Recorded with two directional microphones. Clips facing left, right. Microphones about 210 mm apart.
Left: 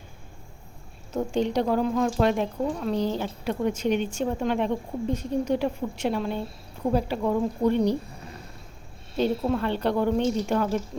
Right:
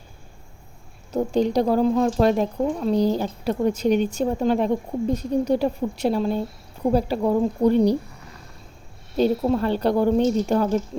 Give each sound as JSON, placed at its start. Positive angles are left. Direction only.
{"t": 1.1, "sound": "speech", "side_deg": -40}
{"t": 9.4, "sound": "speech", "side_deg": -30}